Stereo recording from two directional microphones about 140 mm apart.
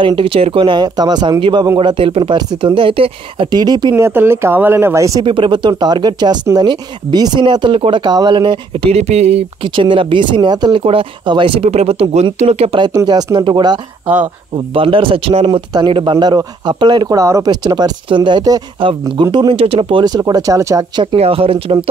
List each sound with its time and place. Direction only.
0.0 s speech: 35° right (ahead or behind)
3.9 s speech: 15° right (ahead or behind)
5.2 s speech: 35° right (ahead or behind)
12.8 s speech: 30° right (ahead or behind)
21.2 s speech: 45° right (ahead or behind)